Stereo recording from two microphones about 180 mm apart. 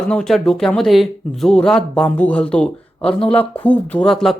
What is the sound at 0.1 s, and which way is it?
Speech, 5° left (ahead or behind).